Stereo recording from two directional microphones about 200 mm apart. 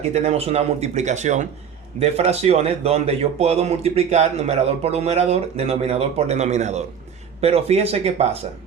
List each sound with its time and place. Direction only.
0.1 s speech: 30° right (ahead or behind)